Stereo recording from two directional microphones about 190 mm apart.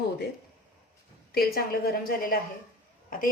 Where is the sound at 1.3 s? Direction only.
55° left (ahead or behind).